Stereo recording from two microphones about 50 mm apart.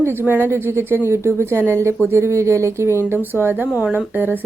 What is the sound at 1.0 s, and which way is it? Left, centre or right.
Speech, right.